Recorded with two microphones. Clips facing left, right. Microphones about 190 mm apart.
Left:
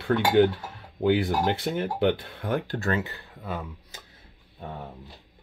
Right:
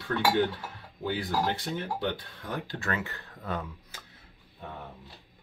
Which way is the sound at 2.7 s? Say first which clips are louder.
Left 6 dB; 35° left (ahead or behind).